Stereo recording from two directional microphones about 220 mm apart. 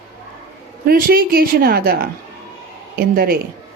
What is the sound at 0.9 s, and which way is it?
A woman's voice, 40° right (ahead or behind).